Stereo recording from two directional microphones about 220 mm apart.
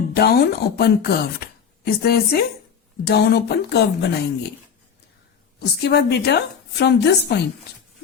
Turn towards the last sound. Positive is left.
turn(degrees=50)  # may be behind; listen again after turning